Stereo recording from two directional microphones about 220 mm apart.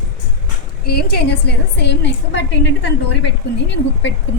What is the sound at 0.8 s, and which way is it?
A woman's voice, 45° left (ahead or behind).